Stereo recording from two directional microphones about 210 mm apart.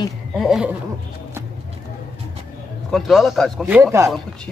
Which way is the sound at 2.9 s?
Centre (ahead or behind).